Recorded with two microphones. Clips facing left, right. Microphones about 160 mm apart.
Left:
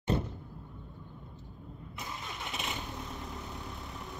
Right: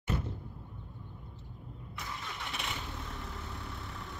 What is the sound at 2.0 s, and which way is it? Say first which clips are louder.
Vehicle: even; 20° left (ahead or behind).